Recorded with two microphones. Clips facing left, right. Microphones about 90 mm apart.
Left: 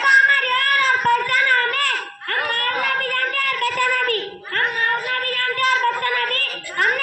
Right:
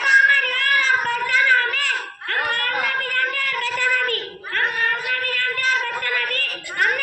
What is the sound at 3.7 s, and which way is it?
Child singing, 45° left (ahead or behind).